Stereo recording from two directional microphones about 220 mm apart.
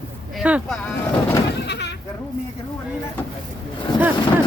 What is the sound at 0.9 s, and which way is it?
Boat, 5° left (ahead or behind).